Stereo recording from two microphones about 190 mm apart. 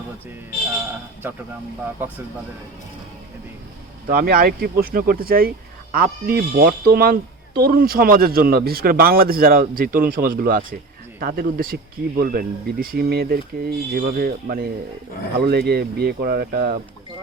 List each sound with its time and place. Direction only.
4.1 s speech: 50° right (ahead or behind)